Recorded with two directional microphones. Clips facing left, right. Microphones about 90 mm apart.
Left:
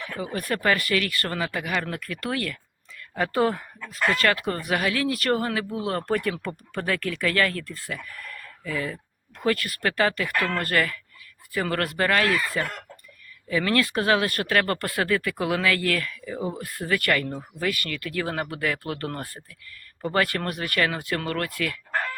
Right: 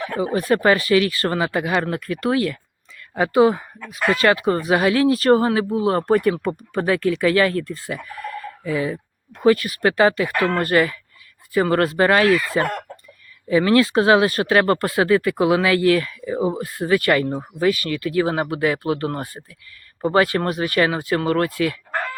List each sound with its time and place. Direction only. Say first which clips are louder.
0.3 s speech: right 7 dB; 20° right (ahead or behind)
12.5 s speech: right 8 dB; 60° right (ahead or behind)
13.5 s speech: right 8 dB; 20° right (ahead or behind)